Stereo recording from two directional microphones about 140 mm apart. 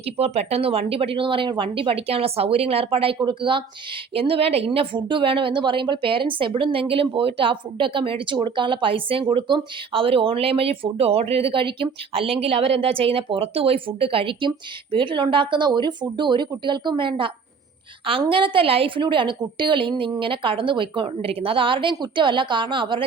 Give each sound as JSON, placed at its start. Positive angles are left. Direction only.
{"t": 0.0, "sound": "a woman's voice", "side_deg": -45}